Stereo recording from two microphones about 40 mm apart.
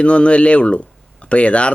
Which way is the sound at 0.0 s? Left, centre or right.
Left.